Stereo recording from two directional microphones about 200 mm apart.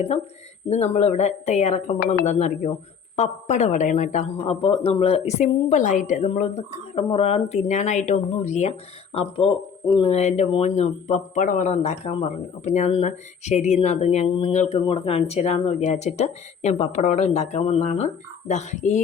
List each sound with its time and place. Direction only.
0.7 s a woman's voice: 35° left (ahead or behind)